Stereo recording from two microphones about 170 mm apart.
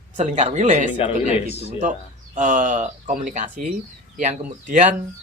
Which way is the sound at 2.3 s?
50° right (ahead or behind).